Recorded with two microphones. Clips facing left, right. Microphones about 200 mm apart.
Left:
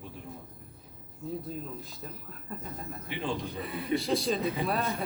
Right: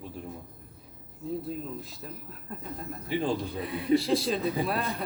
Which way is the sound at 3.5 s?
Centre (ahead or behind).